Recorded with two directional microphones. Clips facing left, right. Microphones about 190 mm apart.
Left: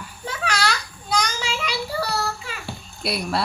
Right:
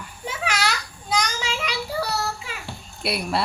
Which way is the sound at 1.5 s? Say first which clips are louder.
Left 1 dB; 5° left (ahead or behind).